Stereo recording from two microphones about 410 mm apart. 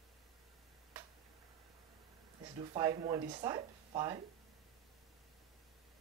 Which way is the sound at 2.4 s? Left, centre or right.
Centre.